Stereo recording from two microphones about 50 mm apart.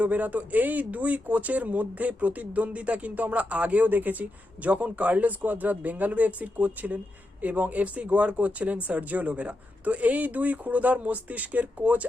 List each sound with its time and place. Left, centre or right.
0.0 s a man's voice: right